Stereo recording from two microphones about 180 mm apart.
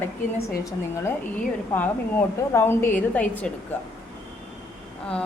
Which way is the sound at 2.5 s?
15° left (ahead or behind).